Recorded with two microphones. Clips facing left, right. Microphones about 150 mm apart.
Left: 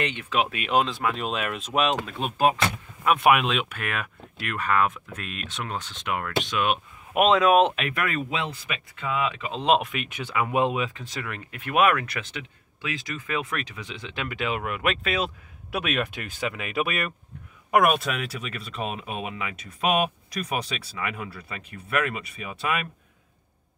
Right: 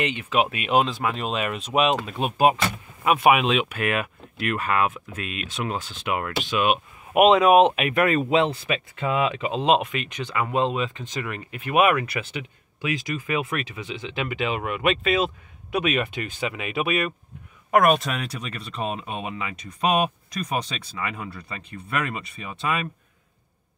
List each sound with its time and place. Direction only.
0.0 s speech: 5° right (ahead or behind)
3.1 s speech: 5° right (ahead or behind)
7.9 s speech: 25° right (ahead or behind)
9.6 s speech: centre (ahead or behind)